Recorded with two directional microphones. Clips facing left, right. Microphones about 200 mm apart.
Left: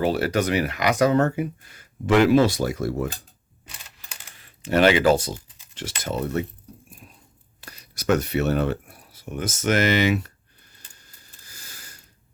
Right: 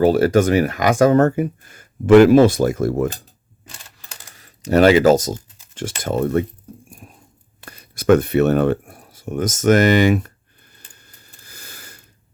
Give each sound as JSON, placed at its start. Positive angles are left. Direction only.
{"t": 0.0, "sound": "speech", "side_deg": -45}
{"t": 4.1, "sound": "typing", "side_deg": -40}
{"t": 6.9, "sound": "a sound", "side_deg": -50}